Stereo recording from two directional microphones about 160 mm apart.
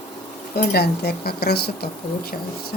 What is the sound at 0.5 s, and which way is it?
Speech, 90° left.